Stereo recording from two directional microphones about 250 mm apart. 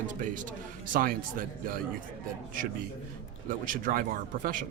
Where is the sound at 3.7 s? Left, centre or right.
Right.